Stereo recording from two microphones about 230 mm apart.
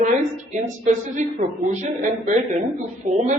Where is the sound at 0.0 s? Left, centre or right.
Right.